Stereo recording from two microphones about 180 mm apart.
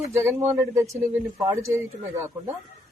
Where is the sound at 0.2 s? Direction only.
15° right (ahead or behind).